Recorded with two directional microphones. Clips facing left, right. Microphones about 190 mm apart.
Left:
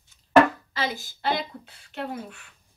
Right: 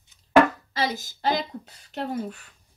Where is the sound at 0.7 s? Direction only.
40° right (ahead or behind).